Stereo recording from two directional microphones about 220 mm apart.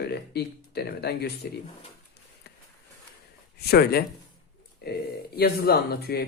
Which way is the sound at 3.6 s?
45° left (ahead or behind).